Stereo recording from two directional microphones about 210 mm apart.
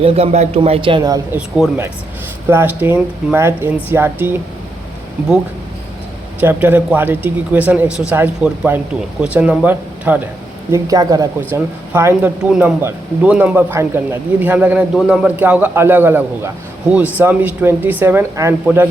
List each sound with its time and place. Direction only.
0.0 s a man's voice: 30° right (ahead or behind)
1.4 s speech: 5° right (ahead or behind)
6.4 s speech: 10° right (ahead or behind)